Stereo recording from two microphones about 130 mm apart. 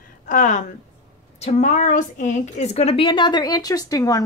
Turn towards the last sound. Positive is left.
turn(degrees=30)  # may be behind; listen again after turning